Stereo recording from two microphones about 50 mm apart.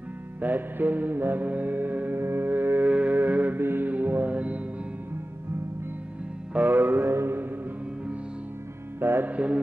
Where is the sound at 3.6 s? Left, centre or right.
Right.